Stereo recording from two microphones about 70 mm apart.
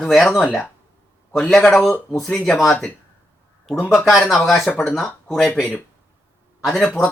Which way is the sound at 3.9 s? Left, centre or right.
Centre.